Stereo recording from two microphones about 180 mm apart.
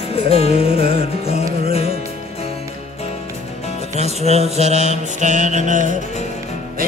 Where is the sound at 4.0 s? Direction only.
35° right (ahead or behind).